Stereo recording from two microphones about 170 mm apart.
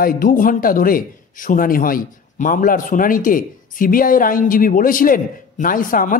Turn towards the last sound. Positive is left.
turn(degrees=55)  # may be behind; listen again after turning